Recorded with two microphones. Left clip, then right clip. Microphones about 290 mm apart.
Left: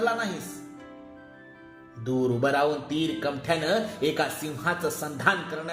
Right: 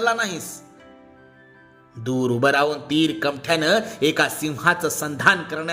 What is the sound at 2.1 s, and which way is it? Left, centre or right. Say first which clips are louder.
Speech: right 5 dB; right.